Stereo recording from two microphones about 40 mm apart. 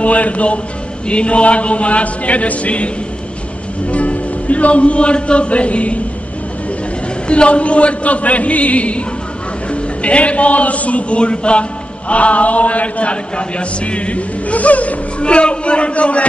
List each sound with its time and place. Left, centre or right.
0.0 s speech: left
7.2 s a man's voice: left